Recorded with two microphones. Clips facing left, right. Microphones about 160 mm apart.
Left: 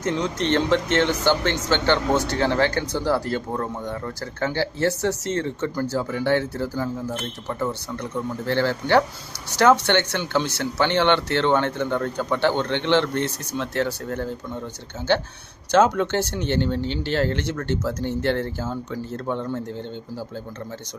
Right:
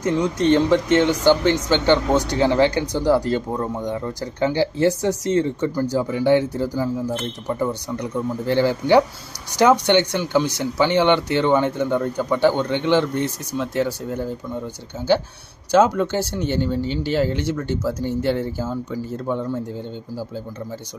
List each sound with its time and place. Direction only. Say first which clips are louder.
0.0 s speech: right 5 dB; 10° right (ahead or behind)
15.7 s speech: right 2 dB; 5° right (ahead or behind)